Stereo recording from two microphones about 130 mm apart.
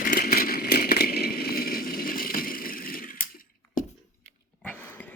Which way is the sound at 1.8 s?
90° left.